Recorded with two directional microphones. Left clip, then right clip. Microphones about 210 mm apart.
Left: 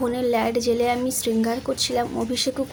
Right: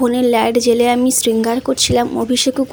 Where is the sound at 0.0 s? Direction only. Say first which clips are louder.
Right 8 dB; 35° right (ahead or behind).